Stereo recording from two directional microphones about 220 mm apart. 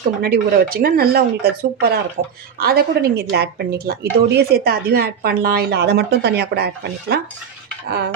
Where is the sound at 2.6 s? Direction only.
45° right (ahead or behind).